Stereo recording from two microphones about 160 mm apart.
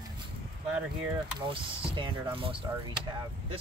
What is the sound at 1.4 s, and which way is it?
Speech, 35° right (ahead or behind).